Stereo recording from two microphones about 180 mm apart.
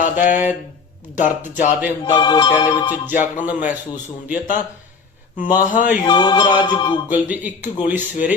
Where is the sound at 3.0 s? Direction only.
45° left (ahead or behind).